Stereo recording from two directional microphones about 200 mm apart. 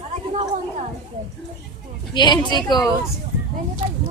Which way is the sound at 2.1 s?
20° left (ahead or behind).